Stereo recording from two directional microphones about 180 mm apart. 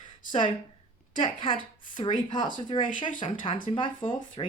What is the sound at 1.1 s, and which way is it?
Speech, 30° left (ahead or behind).